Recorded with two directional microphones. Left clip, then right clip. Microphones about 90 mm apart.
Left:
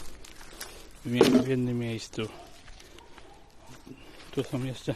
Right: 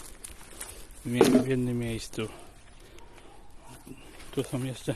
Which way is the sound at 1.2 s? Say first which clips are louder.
Even; 65° left (ahead or behind).